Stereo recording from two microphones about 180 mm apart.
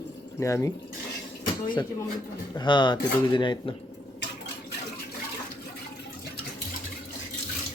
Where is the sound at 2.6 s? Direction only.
25° left (ahead or behind).